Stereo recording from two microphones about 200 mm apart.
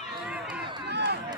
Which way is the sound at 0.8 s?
55° right (ahead or behind).